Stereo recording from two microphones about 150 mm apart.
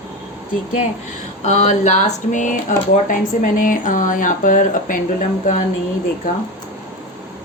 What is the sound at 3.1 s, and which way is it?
Speech, 65° left (ahead or behind).